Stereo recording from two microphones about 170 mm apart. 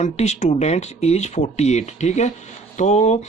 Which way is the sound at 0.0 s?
45° left (ahead or behind).